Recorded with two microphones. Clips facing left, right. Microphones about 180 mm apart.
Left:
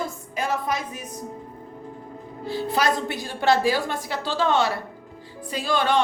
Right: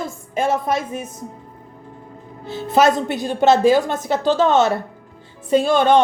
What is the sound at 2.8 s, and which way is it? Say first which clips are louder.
A woman's voice: right 10 dB; 20° right (ahead or behind).